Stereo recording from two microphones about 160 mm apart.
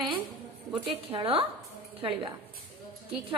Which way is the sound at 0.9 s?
35° right (ahead or behind).